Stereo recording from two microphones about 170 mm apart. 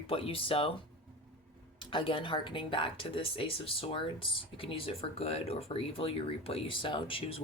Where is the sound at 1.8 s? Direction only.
30° left (ahead or behind).